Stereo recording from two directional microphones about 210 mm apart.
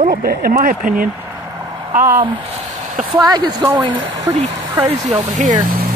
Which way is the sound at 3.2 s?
20° right (ahead or behind).